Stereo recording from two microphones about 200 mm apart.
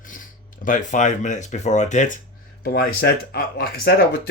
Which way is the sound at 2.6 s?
50° left (ahead or behind).